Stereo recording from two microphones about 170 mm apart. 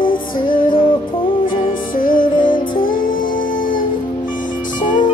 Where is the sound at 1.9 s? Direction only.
55° left (ahead or behind).